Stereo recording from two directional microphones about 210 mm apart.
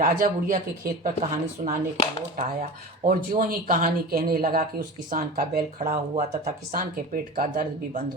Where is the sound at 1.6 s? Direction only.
45° right (ahead or behind).